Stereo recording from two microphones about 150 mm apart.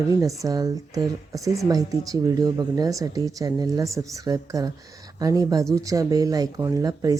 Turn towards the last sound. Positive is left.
turn(degrees=-25)  # may be behind; listen again after turning